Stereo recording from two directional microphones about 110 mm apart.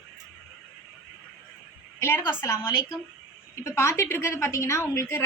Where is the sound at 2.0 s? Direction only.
20° left (ahead or behind).